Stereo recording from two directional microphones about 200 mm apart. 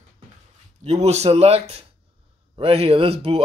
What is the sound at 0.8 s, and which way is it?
Speech, 35° right (ahead or behind).